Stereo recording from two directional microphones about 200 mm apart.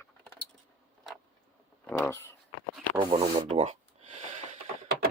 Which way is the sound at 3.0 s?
25° right (ahead or behind).